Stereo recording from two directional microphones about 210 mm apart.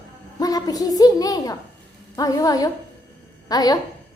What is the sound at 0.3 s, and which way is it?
A child's voice, 15° left (ahead or behind).